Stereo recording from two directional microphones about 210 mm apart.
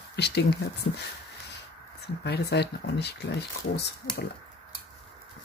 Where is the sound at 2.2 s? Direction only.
50° left (ahead or behind).